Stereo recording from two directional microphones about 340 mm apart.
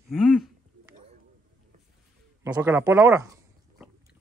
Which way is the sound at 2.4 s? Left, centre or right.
Centre.